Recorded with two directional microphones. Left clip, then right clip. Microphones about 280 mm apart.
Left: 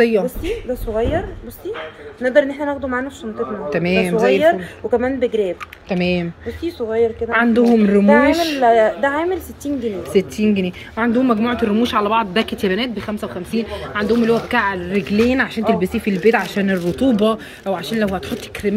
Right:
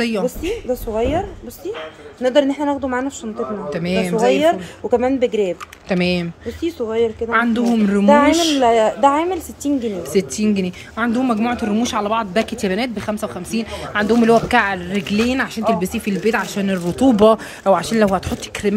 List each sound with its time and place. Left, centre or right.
0.0 s speech: centre
0.4 s speech: right
2.2 s speech: right
3.7 s speech: centre
4.3 s speech: right
5.9 s speech: centre
6.4 s speech: right
7.2 s speech: centre
8.1 s speech: right
10.1 s speech: centre